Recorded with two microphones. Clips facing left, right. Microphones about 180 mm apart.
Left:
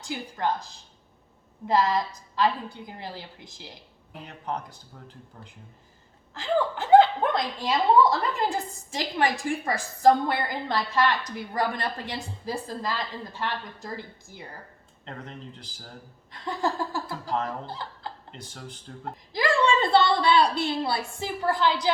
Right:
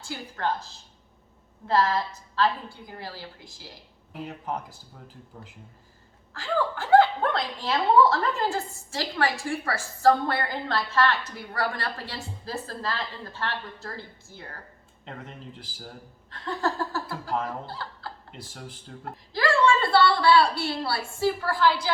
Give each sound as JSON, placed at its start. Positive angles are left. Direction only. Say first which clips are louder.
{"t": 0.0, "sound": "a woman's voice", "louder": "left 1 dB", "side_deg": 15}
{"t": 4.3, "sound": "speech", "louder": "left 1 dB", "side_deg": -5}
{"t": 6.3, "sound": "a woman's voice", "louder": "left 2 dB", "side_deg": 20}
{"t": 15.0, "sound": "speech", "louder": "left 1 dB", "side_deg": -5}
{"t": 16.3, "sound": "a woman's voice", "louder": "even", "side_deg": 15}
{"t": 18.3, "sound": "speech", "louder": "even", "side_deg": -5}
{"t": 19.3, "sound": "a woman's voice", "louder": "right 1 dB", "side_deg": 15}